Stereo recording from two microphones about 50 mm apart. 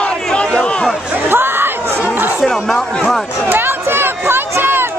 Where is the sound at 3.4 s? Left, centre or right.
Right.